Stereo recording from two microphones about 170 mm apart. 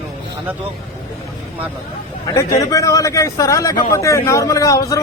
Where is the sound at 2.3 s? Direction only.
20° left (ahead or behind).